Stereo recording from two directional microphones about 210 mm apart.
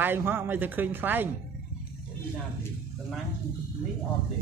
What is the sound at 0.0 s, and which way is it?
Speech, 10° right (ahead or behind).